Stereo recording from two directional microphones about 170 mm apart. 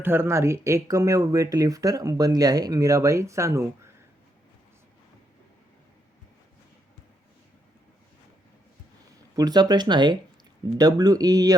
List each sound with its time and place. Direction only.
0.0 s speech: 15° right (ahead or behind)
9.3 s speech: 25° right (ahead or behind)